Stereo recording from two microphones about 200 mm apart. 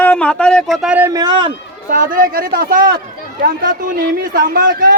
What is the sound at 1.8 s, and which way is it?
Speech, 45° right (ahead or behind).